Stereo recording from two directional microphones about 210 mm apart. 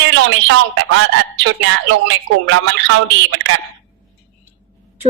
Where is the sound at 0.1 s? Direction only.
65° right (ahead or behind).